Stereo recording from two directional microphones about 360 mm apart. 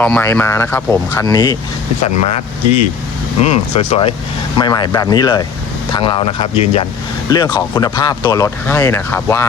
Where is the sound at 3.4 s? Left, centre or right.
Centre.